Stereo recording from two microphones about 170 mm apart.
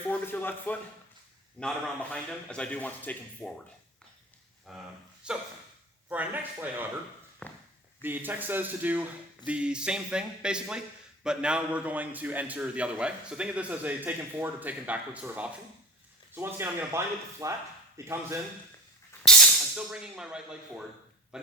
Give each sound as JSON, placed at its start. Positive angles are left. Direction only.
{"t": 0.1, "sound": "a man's voice", "side_deg": 10}
{"t": 4.7, "sound": "speech", "side_deg": 0}
{"t": 5.2, "sound": "dog", "side_deg": -5}
{"t": 6.1, "sound": "speech", "side_deg": -10}
{"t": 7.4, "sound": "a man's voice", "side_deg": 5}
{"t": 8.0, "sound": "speech", "side_deg": -10}
{"t": 19.2, "sound": "speech", "side_deg": 0}